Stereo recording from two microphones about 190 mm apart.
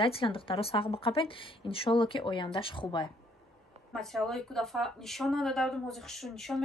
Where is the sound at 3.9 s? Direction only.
Centre (ahead or behind).